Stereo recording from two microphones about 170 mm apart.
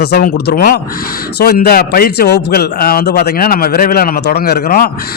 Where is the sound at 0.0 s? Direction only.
65° left (ahead or behind).